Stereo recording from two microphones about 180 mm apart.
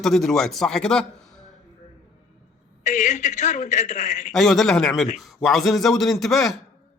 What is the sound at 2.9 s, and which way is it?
A man's voice, 40° left (ahead or behind).